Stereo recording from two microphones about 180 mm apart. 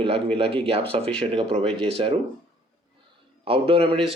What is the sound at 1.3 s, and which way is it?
Speech, 30° right (ahead or behind).